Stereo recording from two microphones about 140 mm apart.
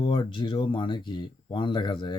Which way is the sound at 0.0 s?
40° left (ahead or behind).